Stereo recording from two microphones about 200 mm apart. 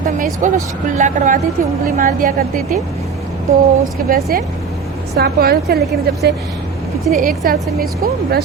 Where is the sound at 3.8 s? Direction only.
45° right (ahead or behind).